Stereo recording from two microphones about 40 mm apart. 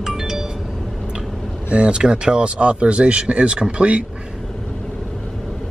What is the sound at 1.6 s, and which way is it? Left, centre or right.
Speech, right.